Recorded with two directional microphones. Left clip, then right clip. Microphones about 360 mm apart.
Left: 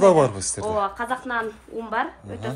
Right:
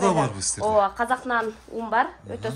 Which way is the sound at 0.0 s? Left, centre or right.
Centre.